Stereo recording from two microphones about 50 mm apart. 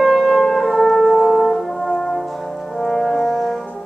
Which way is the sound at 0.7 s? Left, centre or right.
Centre.